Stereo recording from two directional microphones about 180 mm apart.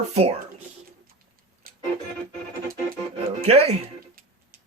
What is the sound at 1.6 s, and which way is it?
Music, 55° right (ahead or behind).